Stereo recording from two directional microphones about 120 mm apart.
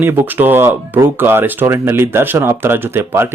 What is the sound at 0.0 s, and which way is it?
Speech, 20° right (ahead or behind).